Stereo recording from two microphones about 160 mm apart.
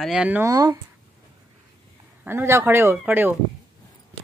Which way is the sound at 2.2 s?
15° right (ahead or behind).